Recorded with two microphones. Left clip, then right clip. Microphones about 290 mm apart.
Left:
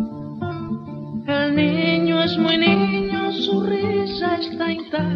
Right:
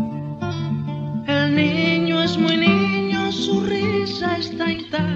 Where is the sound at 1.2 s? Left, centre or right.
Centre.